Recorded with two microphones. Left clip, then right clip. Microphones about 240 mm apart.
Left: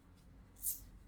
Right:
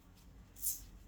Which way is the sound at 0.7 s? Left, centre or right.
Centre.